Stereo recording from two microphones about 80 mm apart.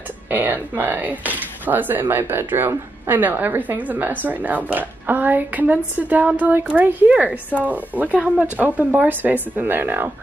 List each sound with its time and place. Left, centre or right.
0.3 s speech: right